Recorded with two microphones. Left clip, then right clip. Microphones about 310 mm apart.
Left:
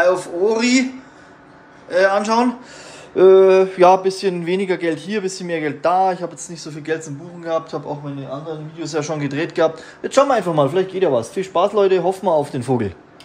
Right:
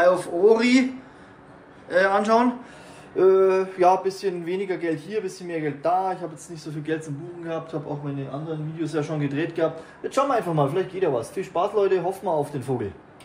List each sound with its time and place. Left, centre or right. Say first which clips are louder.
0.0 s a man's voice: left 2 dB; centre
1.9 s a man's voice: left 4 dB; centre
3.2 s a man's voice: left 8 dB; left